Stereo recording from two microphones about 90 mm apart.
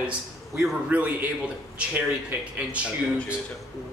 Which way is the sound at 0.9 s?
20° right (ahead or behind).